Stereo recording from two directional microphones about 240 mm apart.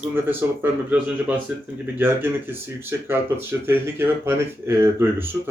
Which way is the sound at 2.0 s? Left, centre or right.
Centre.